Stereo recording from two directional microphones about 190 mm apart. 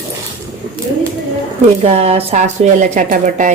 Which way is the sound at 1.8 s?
35° right (ahead or behind).